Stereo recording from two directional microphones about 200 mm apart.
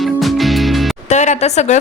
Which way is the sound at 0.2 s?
Centre (ahead or behind).